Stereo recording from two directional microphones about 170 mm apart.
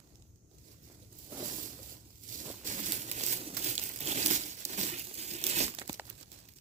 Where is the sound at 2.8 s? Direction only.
45° right (ahead or behind).